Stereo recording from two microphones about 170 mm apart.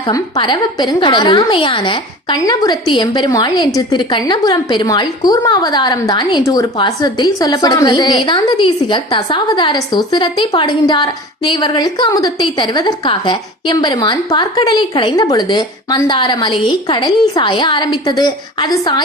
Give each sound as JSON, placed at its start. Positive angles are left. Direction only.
{"t": 0.1, "sound": "a woman's voice", "side_deg": 25}